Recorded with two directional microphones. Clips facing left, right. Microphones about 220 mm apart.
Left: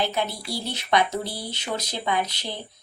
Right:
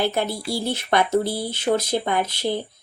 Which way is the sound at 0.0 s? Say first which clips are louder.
Right 4 dB; 50° right (ahead or behind).